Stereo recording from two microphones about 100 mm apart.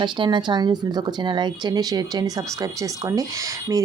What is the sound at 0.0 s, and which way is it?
Speech, 50° right (ahead or behind).